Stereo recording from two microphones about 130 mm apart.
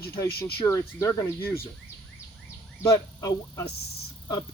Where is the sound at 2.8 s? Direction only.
25° left (ahead or behind).